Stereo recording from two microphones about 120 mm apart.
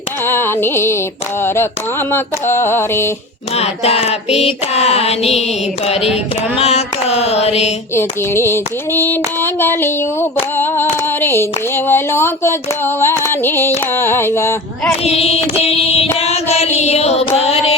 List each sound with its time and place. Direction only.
0.3 s female singing: 20° left (ahead or behind)
3.5 s music: 60° left (ahead or behind)
7.9 s female singing: 20° left (ahead or behind)
16.0 s music: 60° left (ahead or behind)